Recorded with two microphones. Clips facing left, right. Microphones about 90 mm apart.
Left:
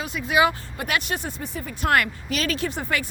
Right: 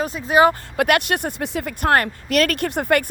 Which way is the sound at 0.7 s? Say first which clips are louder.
Right 8 dB; 75° right (ahead or behind).